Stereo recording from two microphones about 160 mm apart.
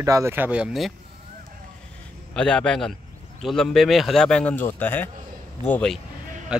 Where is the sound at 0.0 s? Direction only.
20° right (ahead or behind); by 0.9 s 5° right (ahead or behind).